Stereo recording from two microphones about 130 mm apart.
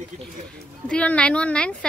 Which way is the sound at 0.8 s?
10° left (ahead or behind).